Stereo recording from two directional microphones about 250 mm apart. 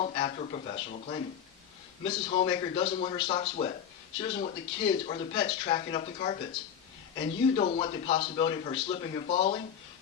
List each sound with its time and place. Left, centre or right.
0.0 s speech: left